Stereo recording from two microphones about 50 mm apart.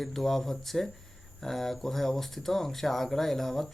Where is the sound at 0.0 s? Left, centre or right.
Centre.